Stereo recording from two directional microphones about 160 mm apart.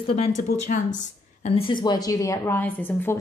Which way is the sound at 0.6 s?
50° left (ahead or behind).